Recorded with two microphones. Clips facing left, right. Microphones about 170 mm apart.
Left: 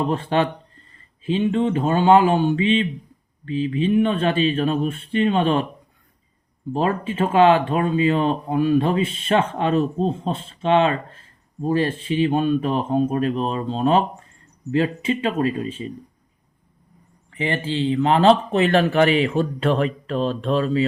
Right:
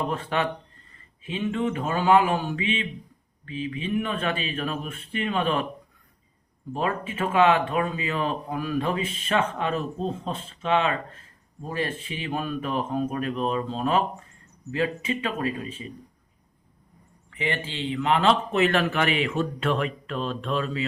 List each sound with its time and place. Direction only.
0.1 s speech: 30° left (ahead or behind)
6.7 s speech: 30° left (ahead or behind)
17.3 s speech: 35° left (ahead or behind)